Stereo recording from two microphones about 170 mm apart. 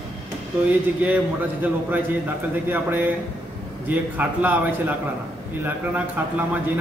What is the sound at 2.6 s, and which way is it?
A man's voice, 10° right (ahead or behind).